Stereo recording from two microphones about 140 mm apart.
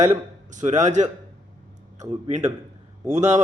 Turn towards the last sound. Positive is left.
turn(degrees=-55)  # may be behind; listen again after turning